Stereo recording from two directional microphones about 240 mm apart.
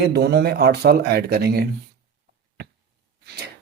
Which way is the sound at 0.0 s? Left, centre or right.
Right.